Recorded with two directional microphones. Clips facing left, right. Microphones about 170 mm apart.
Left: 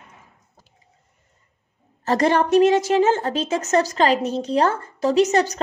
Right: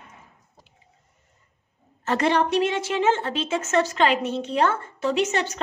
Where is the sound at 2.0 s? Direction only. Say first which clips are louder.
Left 3 dB; 40° left (ahead or behind).